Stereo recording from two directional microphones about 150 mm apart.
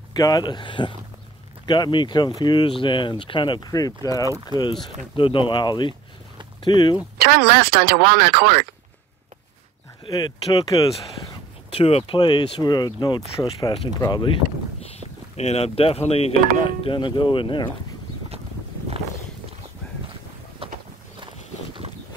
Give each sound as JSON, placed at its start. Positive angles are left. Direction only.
{"t": 0.1, "sound": "speech", "side_deg": 25}
{"t": 7.2, "sound": "speech", "side_deg": -90}
{"t": 10.1, "sound": "speech", "side_deg": 25}
{"t": 11.7, "sound": "speech", "side_deg": 40}
{"t": 15.3, "sound": "speech", "side_deg": 45}